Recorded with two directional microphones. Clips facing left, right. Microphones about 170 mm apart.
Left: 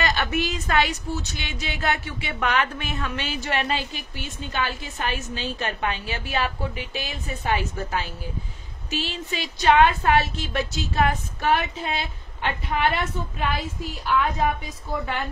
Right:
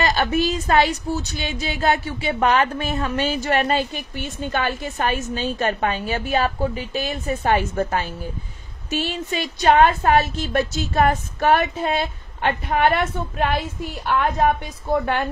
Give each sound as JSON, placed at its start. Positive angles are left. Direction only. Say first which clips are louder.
{"t": 0.0, "sound": "a woman's voice", "louder": "right 5 dB", "side_deg": -35}